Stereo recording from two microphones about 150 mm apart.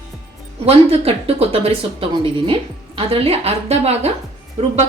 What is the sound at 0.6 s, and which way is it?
Speech, 40° right (ahead or behind).